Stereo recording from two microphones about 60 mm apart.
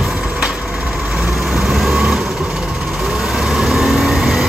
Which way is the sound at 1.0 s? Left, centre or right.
Centre.